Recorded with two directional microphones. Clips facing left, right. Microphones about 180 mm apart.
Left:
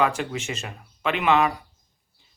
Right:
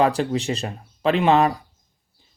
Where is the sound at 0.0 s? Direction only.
35° right (ahead or behind).